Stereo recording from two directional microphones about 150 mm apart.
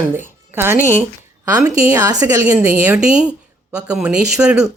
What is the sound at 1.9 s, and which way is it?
Speech, 25° right (ahead or behind).